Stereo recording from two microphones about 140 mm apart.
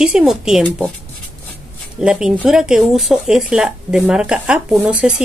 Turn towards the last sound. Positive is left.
turn(degrees=-5)  # may be behind; listen again after turning